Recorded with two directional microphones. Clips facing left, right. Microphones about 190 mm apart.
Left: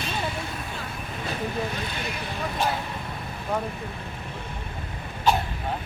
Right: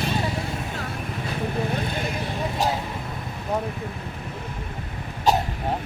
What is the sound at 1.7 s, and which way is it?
Vehicle, 50° right (ahead or behind).